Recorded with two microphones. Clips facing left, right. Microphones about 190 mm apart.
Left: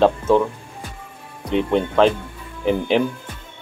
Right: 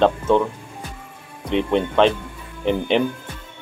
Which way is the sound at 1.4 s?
Centre (ahead or behind).